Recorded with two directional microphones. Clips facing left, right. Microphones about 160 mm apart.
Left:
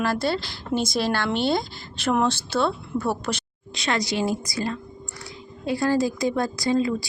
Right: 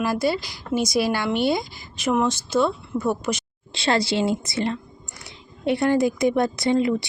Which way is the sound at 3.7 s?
30° right (ahead or behind).